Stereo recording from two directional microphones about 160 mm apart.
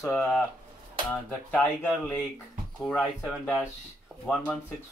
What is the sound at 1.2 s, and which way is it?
Speech, 10° left (ahead or behind).